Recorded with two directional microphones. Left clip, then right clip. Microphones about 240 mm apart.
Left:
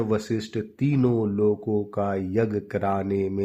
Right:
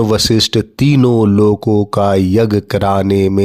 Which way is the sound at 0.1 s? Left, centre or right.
Right.